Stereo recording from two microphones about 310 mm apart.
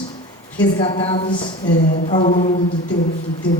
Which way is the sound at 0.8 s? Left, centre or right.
Centre.